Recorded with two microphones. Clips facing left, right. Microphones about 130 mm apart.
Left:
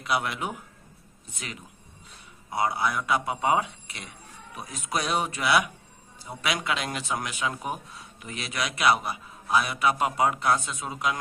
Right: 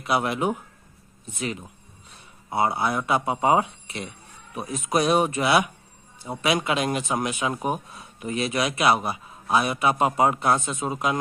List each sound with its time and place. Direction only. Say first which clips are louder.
0.0 s a man's voice: right 5 dB; 25° right (ahead or behind)
2.5 s a man's voice: right 3 dB; 25° right (ahead or behind)